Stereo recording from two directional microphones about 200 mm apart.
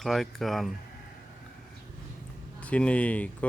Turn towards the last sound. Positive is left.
turn(degrees=5)  # may be behind; listen again after turning